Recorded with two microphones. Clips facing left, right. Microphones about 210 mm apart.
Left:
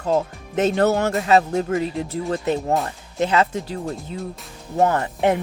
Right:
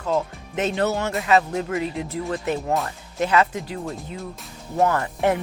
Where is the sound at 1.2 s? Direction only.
35° left (ahead or behind).